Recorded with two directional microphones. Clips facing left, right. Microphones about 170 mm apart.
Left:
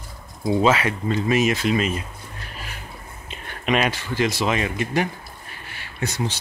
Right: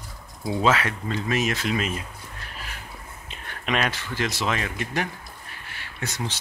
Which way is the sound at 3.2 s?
5° left (ahead or behind).